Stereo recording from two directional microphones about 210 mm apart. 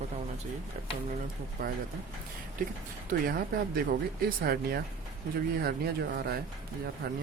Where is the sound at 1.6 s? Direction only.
45° right (ahead or behind).